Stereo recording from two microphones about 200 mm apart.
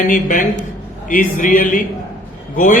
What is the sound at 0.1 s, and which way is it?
A man's voice, 40° left (ahead or behind).